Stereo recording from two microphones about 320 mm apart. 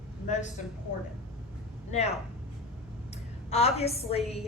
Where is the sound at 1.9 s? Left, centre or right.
Left.